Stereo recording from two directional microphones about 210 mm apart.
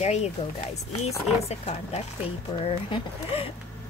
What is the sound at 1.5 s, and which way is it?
Speech, 30° left (ahead or behind).